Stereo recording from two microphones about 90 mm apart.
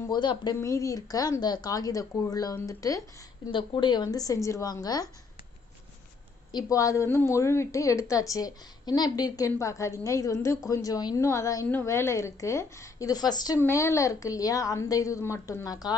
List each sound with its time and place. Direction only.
0.1 s a woman's voice: 55° left (ahead or behind)
0.6 s a woman's voice: 35° left (ahead or behind)
3.5 s a woman's voice: 55° left (ahead or behind)
6.7 s a woman's voice: 40° left (ahead or behind)
11.1 s a woman's voice: 35° left (ahead or behind)
13.6 s a woman's voice: 30° left (ahead or behind)